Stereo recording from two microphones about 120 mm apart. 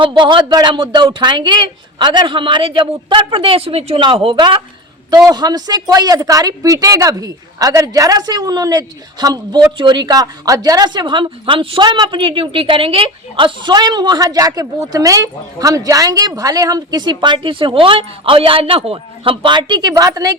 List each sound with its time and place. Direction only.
0.0 s speech: 45° right (ahead or behind)